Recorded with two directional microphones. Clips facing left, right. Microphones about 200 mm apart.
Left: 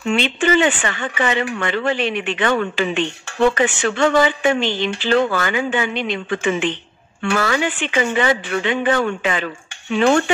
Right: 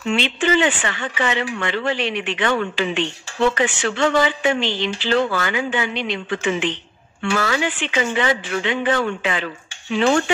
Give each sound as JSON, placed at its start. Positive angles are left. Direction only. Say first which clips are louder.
{"t": 0.1, "sound": "speech", "louder": "left 2 dB", "side_deg": 50}